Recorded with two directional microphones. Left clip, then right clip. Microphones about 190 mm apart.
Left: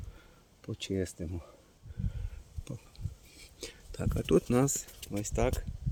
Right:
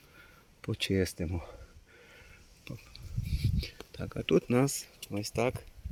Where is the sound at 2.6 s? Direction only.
15° left (ahead or behind).